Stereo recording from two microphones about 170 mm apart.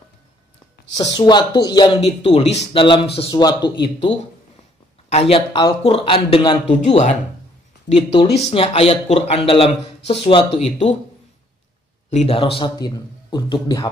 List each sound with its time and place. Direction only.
1.1 s speech: 25° left (ahead or behind)
6.7 s speech: 40° left (ahead or behind)
7.9 s speech: 30° left (ahead or behind)
12.1 s speech: 35° left (ahead or behind)